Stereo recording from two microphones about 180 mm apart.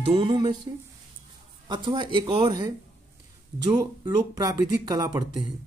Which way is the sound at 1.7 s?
25° right (ahead or behind).